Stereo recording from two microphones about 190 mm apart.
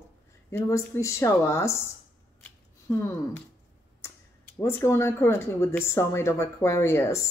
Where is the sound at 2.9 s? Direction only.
15° left (ahead or behind).